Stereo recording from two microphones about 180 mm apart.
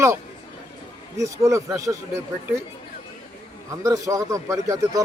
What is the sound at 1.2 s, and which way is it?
A man's voice, 15° right (ahead or behind).